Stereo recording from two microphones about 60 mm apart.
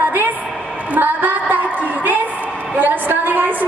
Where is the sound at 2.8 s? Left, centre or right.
Right.